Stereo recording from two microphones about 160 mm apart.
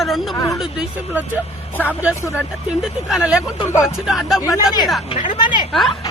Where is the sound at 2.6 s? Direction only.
5° right (ahead or behind).